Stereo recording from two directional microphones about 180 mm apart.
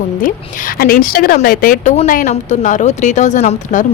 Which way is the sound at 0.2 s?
50° left (ahead or behind).